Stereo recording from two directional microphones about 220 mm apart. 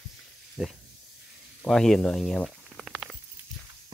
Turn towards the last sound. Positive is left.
turn(degrees=0)  # may be behind; listen again after turning